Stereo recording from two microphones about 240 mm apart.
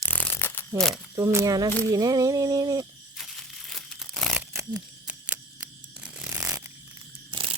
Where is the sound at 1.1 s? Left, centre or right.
Centre.